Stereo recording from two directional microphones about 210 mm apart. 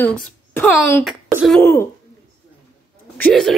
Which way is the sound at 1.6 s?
10° left (ahead or behind).